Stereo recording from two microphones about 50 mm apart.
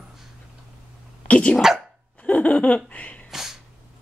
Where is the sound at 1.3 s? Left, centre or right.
Left.